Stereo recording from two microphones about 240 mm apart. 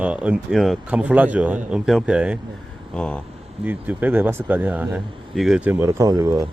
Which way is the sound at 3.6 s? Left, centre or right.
Centre.